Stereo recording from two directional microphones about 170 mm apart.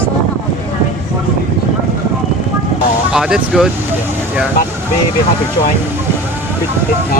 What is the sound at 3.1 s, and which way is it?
Speech, 5° right (ahead or behind).